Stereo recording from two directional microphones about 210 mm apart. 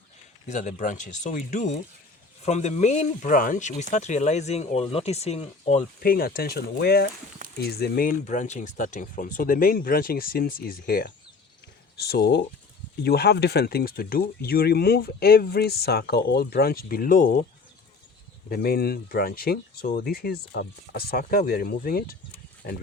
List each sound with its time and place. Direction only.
0.4 s speech: 35° left (ahead or behind)
6.0 s speech: 45° left (ahead or behind)
18.4 s speech: 45° left (ahead or behind)